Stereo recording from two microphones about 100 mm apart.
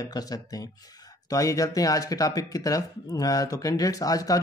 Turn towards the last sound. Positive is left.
turn(degrees=35)  # may be behind; listen again after turning